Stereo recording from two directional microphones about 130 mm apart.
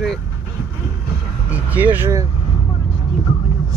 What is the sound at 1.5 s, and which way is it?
Speech, 15° right (ahead or behind).